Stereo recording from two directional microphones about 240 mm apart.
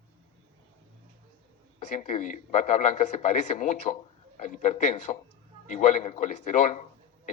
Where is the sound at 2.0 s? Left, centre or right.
Left.